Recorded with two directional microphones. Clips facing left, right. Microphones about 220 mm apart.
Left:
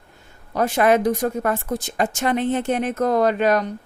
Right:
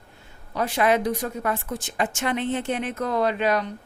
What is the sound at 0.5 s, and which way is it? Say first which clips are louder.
A woman's voice: left 4 dB; 45° left (ahead or behind).